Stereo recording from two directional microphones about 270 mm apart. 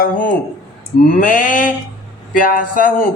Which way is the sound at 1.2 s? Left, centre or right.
Left.